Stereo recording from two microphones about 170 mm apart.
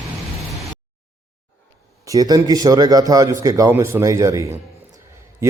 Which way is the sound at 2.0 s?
20° right (ahead or behind).